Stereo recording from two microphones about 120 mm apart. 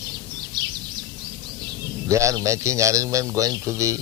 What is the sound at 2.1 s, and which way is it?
A man's voice, 25° right (ahead or behind).